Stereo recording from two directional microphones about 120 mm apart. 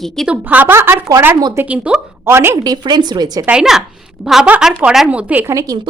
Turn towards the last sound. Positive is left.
turn(degrees=-25)  # may be behind; listen again after turning